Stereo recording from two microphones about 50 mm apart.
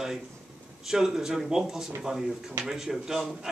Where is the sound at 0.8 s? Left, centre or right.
Centre.